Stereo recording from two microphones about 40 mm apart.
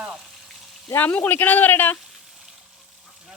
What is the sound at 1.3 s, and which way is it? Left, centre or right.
Speech, left.